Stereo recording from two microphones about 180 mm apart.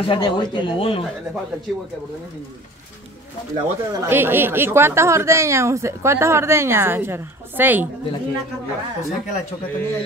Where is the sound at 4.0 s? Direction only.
10° right (ahead or behind).